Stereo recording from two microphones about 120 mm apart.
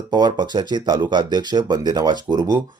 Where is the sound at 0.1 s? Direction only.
35° right (ahead or behind).